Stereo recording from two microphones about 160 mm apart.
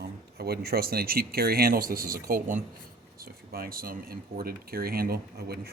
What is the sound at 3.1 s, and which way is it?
Speech, 70° right (ahead or behind).